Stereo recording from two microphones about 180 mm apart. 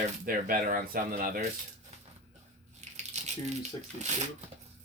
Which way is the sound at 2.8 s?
40° right (ahead or behind).